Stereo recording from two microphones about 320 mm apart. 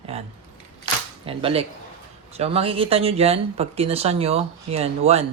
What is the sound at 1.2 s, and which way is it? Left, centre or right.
Speech, centre.